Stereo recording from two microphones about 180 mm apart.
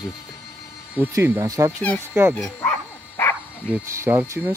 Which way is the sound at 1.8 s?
10° left (ahead or behind).